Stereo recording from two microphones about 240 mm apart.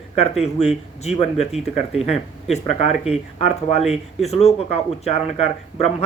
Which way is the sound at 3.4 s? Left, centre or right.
Left.